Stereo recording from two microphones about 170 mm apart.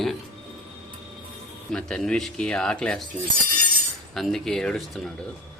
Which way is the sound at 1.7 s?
5° left (ahead or behind).